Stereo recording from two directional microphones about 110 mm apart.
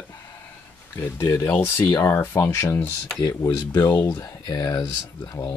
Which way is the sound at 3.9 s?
25° left (ahead or behind).